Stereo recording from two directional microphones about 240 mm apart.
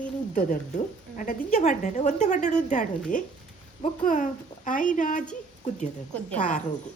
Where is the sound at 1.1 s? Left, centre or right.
Left.